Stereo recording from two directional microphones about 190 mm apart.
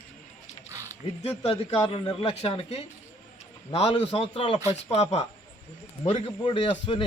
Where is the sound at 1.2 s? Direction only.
35° left (ahead or behind).